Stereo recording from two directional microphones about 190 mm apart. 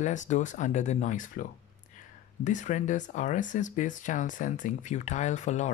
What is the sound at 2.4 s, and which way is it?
Speech, 40° left (ahead or behind).